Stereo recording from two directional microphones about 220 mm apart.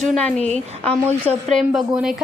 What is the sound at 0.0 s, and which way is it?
A woman's voice, 5° left (ahead or behind).